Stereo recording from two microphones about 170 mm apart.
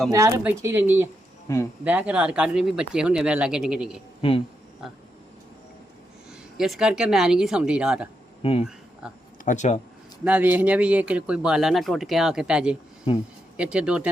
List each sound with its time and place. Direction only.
0.1 s speech: 20° right (ahead or behind)
4.2 s speech: 30° left (ahead or behind)
6.6 s speech: 5° right (ahead or behind)
8.4 s speech: 35° left (ahead or behind)
9.4 s speech: 45° left (ahead or behind)
10.2 s speech: 10° right (ahead or behind)
13.1 s speech: 35° left (ahead or behind)
13.6 s speech: 5° right (ahead or behind)